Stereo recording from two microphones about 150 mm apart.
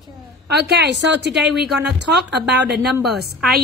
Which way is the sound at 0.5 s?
90° right.